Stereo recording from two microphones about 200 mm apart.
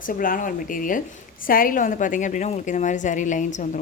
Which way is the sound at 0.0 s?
45° left (ahead or behind).